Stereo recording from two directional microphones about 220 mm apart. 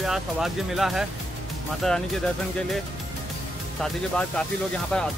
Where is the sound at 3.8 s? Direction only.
5° left (ahead or behind).